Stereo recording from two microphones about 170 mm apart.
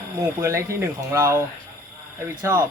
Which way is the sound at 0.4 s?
15° right (ahead or behind).